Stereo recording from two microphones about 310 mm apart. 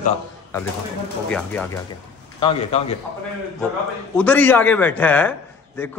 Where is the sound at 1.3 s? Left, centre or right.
Centre.